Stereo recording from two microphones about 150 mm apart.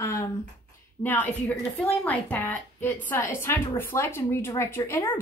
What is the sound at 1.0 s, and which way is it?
A woman's voice, 10° left (ahead or behind).